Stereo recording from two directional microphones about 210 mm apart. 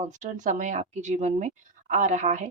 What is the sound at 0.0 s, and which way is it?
Speech, 35° right (ahead or behind).